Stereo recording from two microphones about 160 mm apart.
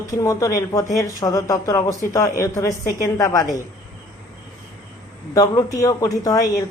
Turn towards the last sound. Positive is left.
turn(degrees=20)  # may be behind; listen again after turning